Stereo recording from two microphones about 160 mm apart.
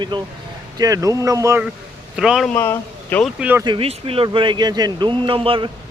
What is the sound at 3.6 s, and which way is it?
Speech, 30° right (ahead or behind).